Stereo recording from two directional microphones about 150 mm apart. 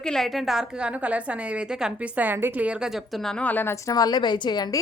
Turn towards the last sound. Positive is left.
turn(degrees=30)  # may be behind; listen again after turning